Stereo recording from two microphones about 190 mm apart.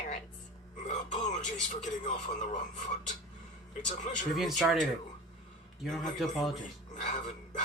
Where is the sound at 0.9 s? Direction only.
40° left (ahead or behind).